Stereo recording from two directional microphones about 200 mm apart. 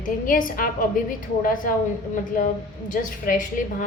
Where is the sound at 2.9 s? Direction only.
40° left (ahead or behind).